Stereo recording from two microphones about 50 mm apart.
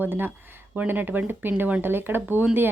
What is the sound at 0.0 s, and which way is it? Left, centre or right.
Speech, right.